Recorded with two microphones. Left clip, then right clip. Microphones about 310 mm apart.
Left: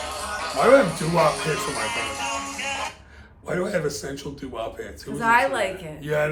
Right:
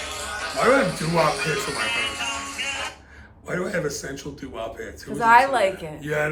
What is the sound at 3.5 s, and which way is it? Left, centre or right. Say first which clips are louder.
A man's voice: left 1 dB; centre.